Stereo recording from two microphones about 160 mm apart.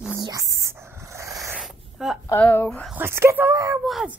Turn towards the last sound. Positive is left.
turn(degrees=0)  # may be behind; listen again after turning